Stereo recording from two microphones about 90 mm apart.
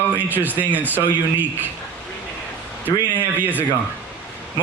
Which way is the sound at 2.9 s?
45° left (ahead or behind).